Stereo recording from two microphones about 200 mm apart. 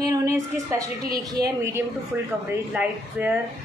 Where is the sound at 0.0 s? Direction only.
15° right (ahead or behind).